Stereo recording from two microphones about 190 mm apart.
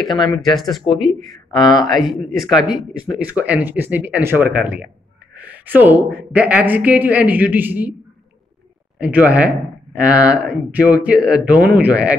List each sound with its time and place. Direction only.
0.1 s speech: 25° left (ahead or behind)
0.6 s speech: centre (ahead or behind)
1.5 s speech: 20° left (ahead or behind)
1.9 s speech: centre (ahead or behind)
5.3 s a sound: 10° right (ahead or behind)
6.1 s speech: 10° right (ahead or behind)
8.9 s a man's voice: 5° right (ahead or behind)